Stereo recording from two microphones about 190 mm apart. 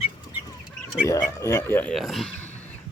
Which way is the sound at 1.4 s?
15° left (ahead or behind).